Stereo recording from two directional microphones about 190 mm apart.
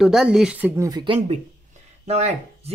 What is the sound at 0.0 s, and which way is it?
Speech, 5° right (ahead or behind).